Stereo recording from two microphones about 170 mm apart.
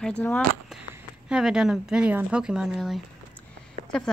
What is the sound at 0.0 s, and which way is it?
Speech, 5° left (ahead or behind).